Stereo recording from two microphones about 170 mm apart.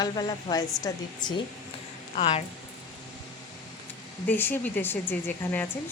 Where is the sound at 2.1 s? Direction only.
40° left (ahead or behind).